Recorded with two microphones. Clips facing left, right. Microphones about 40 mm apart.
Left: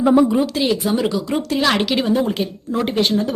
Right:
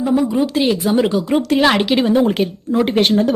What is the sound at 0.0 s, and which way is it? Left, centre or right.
Speech, left.